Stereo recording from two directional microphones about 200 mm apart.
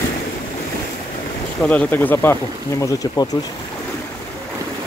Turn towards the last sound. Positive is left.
turn(degrees=15)  # may be behind; listen again after turning